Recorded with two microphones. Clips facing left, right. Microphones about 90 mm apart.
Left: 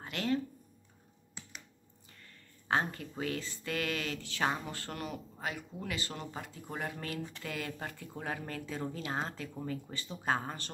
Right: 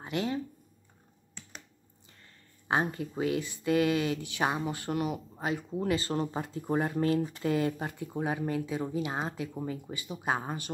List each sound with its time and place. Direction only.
0.0 s speech: 15° right (ahead or behind)
2.2 s speech: 15° right (ahead or behind)
5.5 s speech: 30° right (ahead or behind)